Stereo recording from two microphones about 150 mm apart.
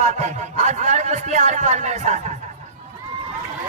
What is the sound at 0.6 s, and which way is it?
Speech, 50° right (ahead or behind).